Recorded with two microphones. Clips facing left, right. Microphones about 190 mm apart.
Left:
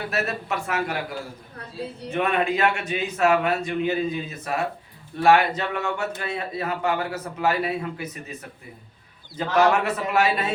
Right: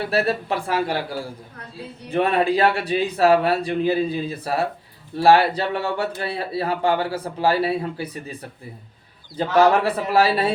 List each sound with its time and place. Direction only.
0.0 s a man's voice: 30° right (ahead or behind)